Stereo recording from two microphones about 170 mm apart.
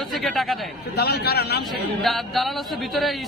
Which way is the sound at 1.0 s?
70° left (ahead or behind).